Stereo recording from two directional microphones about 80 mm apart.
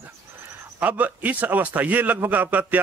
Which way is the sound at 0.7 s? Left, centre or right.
Right.